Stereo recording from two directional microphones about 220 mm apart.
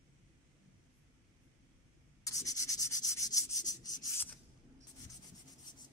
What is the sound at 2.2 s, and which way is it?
Sanding, 15° left (ahead or behind).